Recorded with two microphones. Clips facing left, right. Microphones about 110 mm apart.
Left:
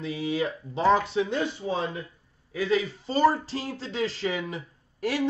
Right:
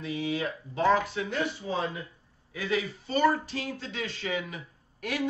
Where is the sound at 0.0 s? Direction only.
30° left (ahead or behind).